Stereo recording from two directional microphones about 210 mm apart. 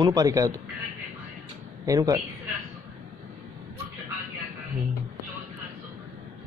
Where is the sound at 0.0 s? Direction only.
15° right (ahead or behind).